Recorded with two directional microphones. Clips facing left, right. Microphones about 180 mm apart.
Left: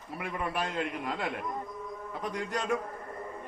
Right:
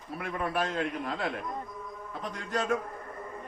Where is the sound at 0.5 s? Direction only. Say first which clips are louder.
Right 2 dB; 15° left (ahead or behind).